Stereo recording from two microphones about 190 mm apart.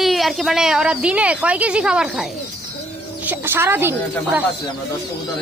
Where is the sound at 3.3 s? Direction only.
10° right (ahead or behind).